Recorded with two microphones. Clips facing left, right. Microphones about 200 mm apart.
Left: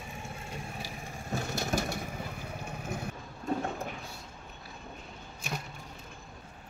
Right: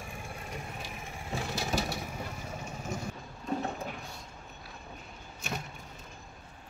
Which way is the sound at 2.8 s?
60° left (ahead or behind).